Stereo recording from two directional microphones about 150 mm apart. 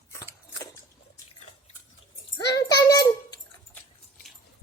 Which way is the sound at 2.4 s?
25° left (ahead or behind).